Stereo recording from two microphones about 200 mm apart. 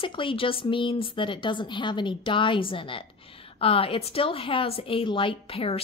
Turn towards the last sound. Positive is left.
turn(degrees=30)  # may be behind; listen again after turning